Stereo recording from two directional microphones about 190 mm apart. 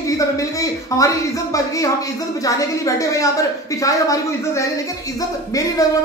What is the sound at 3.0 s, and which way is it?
A man's voice, 15° left (ahead or behind).